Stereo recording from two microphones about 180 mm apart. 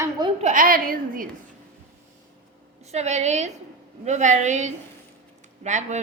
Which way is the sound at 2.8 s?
40° right (ahead or behind).